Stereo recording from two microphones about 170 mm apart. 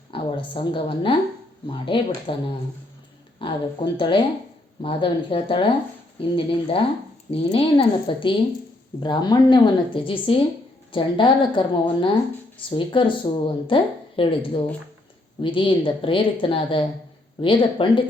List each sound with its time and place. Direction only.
0.1 s speech: 30° left (ahead or behind)
3.3 s speech: 30° left (ahead or behind)